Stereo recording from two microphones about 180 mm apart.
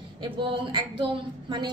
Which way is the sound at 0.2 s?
25° right (ahead or behind).